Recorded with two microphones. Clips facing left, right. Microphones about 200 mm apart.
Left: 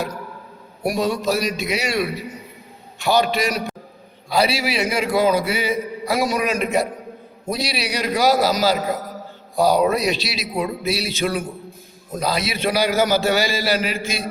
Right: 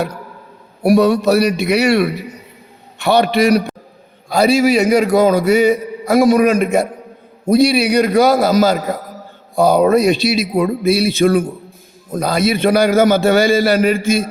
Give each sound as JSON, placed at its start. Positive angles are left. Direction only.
{"t": 0.8, "sound": "a man's voice", "side_deg": -65}
{"t": 4.3, "sound": "a man's voice", "side_deg": -45}